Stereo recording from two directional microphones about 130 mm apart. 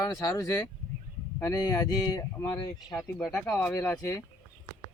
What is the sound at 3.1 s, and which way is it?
Speech, 10° left (ahead or behind).